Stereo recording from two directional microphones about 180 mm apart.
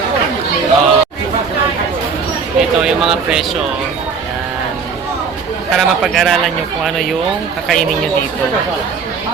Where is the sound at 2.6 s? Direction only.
Centre (ahead or behind).